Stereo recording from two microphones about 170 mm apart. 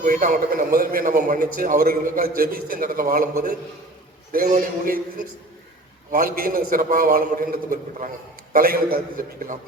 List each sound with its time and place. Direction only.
0.0 s a man's voice: 55° right (ahead or behind)